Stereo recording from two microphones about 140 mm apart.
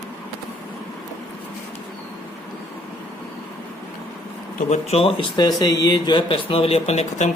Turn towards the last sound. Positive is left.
turn(degrees=55)  # may be behind; listen again after turning